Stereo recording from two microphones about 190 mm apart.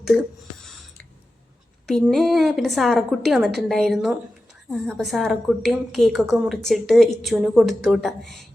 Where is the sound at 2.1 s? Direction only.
Centre (ahead or behind).